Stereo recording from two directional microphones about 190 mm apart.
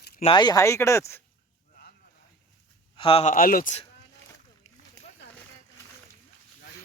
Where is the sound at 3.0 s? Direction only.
30° left (ahead or behind).